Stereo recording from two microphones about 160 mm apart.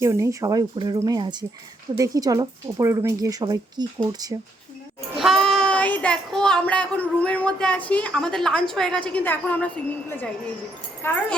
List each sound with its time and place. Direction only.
0.0 s a woman's voice: 20° right (ahead or behind)
5.1 s speech: centre (ahead or behind)